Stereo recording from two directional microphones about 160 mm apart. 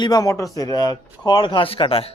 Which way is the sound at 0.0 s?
25° left (ahead or behind).